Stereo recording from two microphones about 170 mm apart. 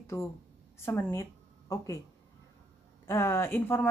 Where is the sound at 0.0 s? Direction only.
15° left (ahead or behind).